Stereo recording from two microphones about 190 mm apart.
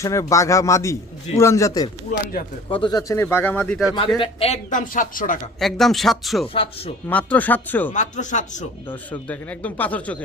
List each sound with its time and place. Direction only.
0.0 s speech: 15° left (ahead or behind)
4.2 s speech: 30° left (ahead or behind)
5.5 s speech: centre (ahead or behind)
6.5 s speech: 30° left (ahead or behind)
7.1 s speech: 10° left (ahead or behind)
7.9 s speech: 40° left (ahead or behind)
8.9 s speech: 10° left (ahead or behind)